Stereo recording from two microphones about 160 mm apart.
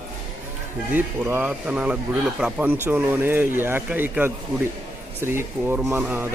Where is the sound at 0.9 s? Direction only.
10° right (ahead or behind).